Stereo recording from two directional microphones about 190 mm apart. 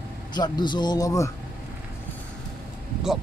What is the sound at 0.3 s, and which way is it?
A man's voice, 20° left (ahead or behind).